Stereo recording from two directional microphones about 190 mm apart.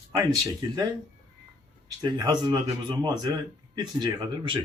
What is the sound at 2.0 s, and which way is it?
Speech, 20° right (ahead or behind).